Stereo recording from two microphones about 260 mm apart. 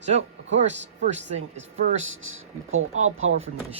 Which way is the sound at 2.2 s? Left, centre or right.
Right.